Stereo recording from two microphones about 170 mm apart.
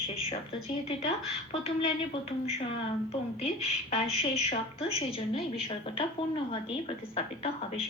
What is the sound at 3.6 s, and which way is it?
Speech, 40° left (ahead or behind).